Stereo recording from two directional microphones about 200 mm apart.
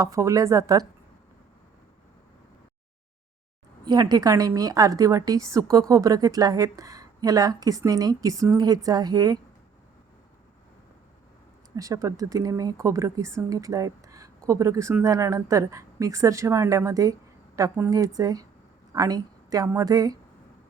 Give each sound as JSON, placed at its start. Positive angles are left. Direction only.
{"t": 0.0, "sound": "a woman's voice", "side_deg": -15}
{"t": 3.8, "sound": "a woman's voice", "side_deg": -20}
{"t": 11.8, "sound": "a woman's voice", "side_deg": -15}